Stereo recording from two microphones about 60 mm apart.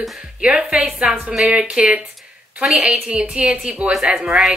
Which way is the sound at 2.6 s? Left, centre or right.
Centre.